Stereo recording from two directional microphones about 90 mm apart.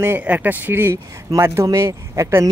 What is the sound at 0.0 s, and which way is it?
Speech, 20° right (ahead or behind).